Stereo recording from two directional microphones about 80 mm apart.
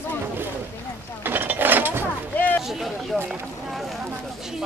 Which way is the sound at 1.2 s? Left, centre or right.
Right.